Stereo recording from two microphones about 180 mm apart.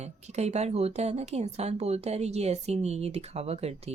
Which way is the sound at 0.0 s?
40° right (ahead or behind).